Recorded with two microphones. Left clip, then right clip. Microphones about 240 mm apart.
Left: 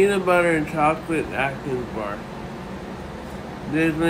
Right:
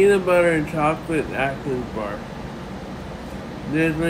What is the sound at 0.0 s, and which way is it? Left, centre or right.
Speech, centre.